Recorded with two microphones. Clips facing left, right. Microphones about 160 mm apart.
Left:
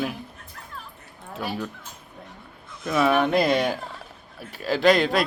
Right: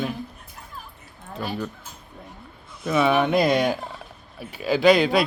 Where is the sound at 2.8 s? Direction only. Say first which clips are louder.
Right 1 dB; centre (ahead or behind).